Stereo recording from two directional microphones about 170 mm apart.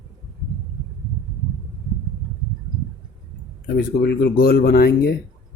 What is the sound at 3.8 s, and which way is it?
Speech, 70° left (ahead or behind).